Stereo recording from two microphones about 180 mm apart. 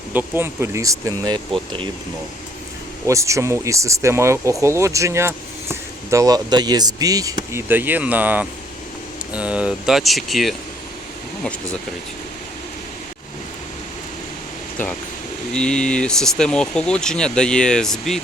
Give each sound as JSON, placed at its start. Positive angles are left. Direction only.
{"t": 0.1, "sound": "speech", "side_deg": -10}
{"t": 3.1, "sound": "speech", "side_deg": -15}
{"t": 15.5, "sound": "speech", "side_deg": 5}